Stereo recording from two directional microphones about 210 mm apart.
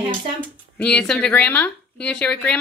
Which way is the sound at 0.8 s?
5° left (ahead or behind).